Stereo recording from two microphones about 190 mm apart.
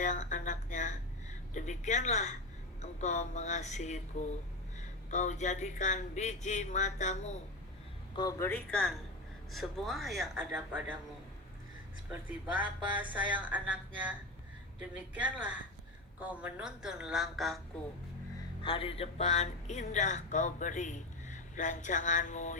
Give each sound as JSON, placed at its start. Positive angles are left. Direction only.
{"t": 0.0, "sound": "a sound", "side_deg": 40}
{"t": 1.5, "sound": "speech", "side_deg": 40}
{"t": 8.1, "sound": "a woman's voice", "side_deg": 20}
{"t": 12.9, "sound": "a woman's voice", "side_deg": -10}
{"t": 18.6, "sound": "speech", "side_deg": 30}